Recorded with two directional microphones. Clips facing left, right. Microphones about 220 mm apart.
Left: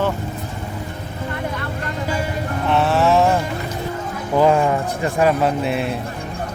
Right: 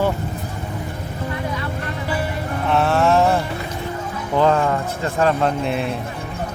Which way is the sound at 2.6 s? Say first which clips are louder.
Even; centre (ahead or behind).